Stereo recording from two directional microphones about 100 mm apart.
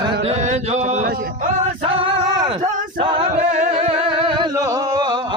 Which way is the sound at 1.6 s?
65° right (ahead or behind).